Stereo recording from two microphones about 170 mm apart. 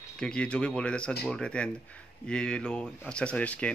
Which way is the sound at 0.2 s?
5° left (ahead or behind).